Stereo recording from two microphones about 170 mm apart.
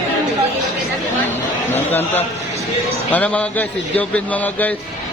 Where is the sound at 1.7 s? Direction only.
10° left (ahead or behind).